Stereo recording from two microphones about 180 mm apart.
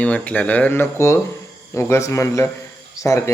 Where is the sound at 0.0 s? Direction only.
5° left (ahead or behind).